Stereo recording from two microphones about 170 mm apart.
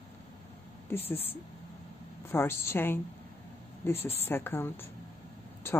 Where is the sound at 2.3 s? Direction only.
15° left (ahead or behind).